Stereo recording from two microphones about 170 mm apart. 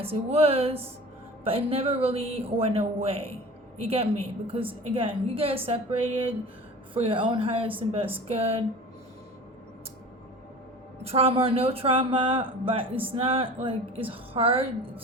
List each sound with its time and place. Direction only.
0.0 s speech: 35° right (ahead or behind)
11.0 s speech: 35° right (ahead or behind)